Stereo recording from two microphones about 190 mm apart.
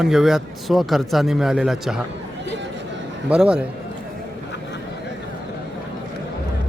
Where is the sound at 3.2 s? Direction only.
5° right (ahead or behind).